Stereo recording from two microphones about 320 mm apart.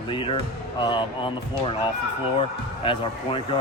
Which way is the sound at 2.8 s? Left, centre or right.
Centre.